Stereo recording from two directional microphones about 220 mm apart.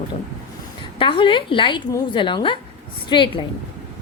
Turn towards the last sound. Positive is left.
turn(degrees=20)  # may be behind; listen again after turning